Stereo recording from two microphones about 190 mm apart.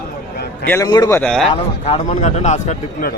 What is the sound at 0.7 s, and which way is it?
Speech, 20° left (ahead or behind).